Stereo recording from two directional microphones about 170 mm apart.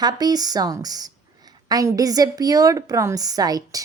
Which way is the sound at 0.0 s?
25° right (ahead or behind).